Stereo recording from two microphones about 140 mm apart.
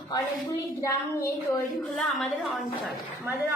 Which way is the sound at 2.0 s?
Centre (ahead or behind).